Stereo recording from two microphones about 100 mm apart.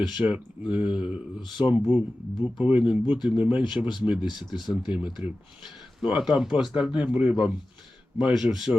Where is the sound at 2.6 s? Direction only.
15° right (ahead or behind).